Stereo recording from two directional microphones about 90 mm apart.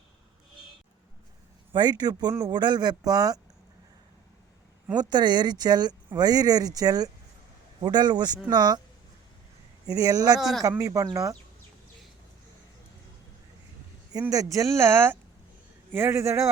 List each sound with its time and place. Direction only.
1.7 s speech: 55° right (ahead or behind)
4.9 s speech: 55° right (ahead or behind)
9.8 s speech: 45° right (ahead or behind)
14.1 s speech: 45° right (ahead or behind)